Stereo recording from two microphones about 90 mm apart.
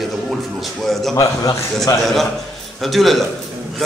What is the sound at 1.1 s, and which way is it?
Speech, 35° left (ahead or behind).